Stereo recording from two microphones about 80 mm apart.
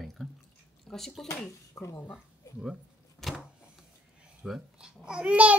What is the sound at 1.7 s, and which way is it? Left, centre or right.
Speech, left.